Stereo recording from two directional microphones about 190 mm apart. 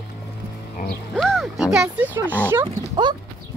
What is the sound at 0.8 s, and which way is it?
Music, 45° left (ahead or behind).